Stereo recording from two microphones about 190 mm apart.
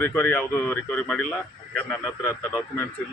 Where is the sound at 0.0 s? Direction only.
10° left (ahead or behind).